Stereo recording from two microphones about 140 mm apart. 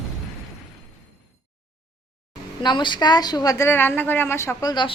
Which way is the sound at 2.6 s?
35° left (ahead or behind).